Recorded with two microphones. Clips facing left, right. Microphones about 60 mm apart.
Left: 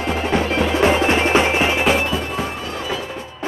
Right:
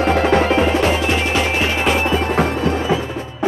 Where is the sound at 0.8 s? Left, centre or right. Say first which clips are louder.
Left 1 dB; left.